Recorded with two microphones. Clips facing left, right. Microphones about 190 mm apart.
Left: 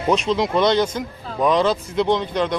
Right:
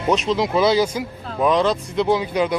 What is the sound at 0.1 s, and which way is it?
Speech, centre (ahead or behind).